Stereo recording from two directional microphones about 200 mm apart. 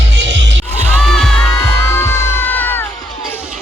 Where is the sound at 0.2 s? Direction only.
65° right (ahead or behind).